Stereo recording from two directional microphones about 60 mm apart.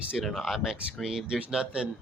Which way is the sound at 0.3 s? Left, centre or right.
Centre.